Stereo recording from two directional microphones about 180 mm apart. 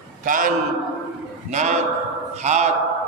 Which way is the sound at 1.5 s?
40° right (ahead or behind).